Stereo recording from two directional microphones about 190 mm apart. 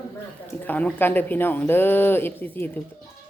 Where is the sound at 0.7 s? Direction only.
10° left (ahead or behind).